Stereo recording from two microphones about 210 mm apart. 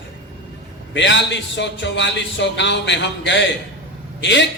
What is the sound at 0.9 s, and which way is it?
A man's voice, 60° left (ahead or behind).